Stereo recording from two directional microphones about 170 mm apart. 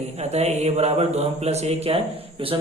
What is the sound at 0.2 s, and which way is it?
Speech, 40° right (ahead or behind).